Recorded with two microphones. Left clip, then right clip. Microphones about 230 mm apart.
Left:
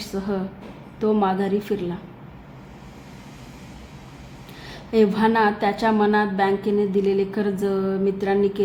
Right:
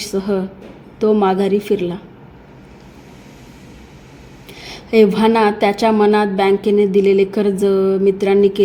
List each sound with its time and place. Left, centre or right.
0.0 s a woman's voice: centre
4.6 s a woman's voice: right